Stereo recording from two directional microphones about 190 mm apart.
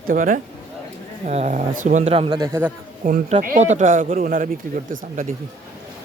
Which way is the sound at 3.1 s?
35° right (ahead or behind).